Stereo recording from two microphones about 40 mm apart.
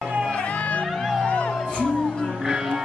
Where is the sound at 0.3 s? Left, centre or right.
Left.